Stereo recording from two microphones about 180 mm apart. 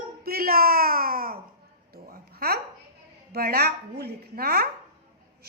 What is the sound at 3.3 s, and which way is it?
A woman's voice, 60° right (ahead or behind).